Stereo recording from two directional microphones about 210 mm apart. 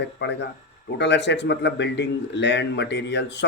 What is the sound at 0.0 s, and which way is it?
Speech, 55° left (ahead or behind).